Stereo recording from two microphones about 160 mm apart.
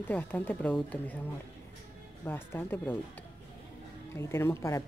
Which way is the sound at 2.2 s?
15° left (ahead or behind).